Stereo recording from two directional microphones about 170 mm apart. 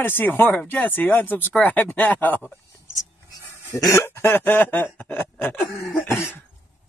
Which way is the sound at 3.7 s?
20° left (ahead or behind).